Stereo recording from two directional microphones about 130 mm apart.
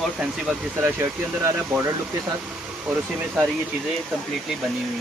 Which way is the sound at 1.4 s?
20° right (ahead or behind).